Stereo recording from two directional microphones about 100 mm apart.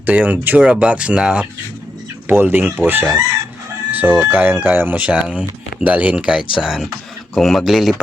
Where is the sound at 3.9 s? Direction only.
20° right (ahead or behind).